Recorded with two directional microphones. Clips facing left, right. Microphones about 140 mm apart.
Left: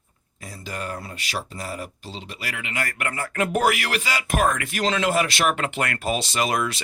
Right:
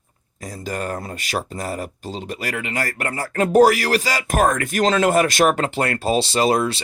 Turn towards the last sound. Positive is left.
turn(degrees=-30)  # may be behind; listen again after turning